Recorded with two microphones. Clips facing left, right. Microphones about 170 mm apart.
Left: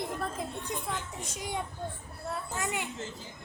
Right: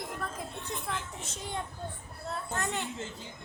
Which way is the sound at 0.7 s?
15° left (ahead or behind).